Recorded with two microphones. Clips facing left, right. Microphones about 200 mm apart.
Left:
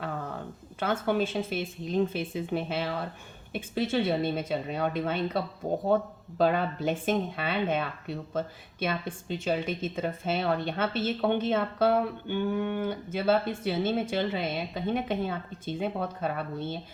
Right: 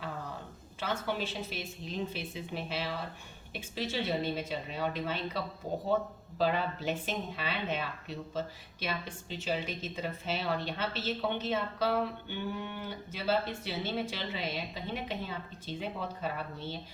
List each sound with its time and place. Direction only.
0.8 s speech: 50° left (ahead or behind)